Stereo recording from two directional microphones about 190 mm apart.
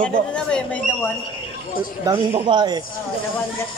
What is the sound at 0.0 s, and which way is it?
Speech, 5° left (ahead or behind).